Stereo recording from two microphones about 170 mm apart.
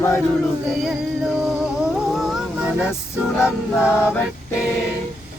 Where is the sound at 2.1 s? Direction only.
Centre (ahead or behind).